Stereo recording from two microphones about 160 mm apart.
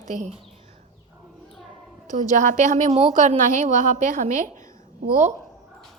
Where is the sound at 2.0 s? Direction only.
50° right (ahead or behind).